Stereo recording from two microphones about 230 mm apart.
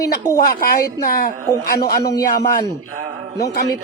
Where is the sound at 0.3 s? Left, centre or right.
Left.